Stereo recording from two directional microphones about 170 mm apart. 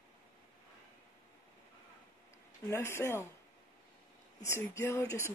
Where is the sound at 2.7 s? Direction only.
15° left (ahead or behind).